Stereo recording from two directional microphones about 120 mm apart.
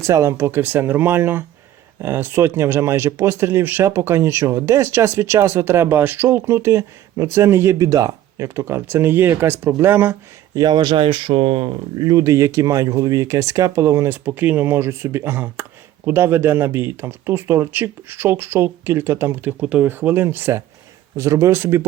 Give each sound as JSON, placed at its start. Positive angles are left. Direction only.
{"t": 0.0, "sound": "speech", "side_deg": -25}
{"t": 10.5, "sound": "speech", "side_deg": -35}
{"t": 12.0, "sound": "speech", "side_deg": -30}